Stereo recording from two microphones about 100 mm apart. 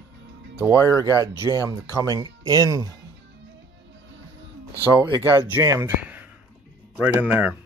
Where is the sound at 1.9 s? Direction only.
35° right (ahead or behind).